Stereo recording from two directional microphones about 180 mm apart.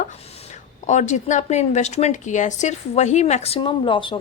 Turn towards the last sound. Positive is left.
turn(degrees=25)  # may be behind; listen again after turning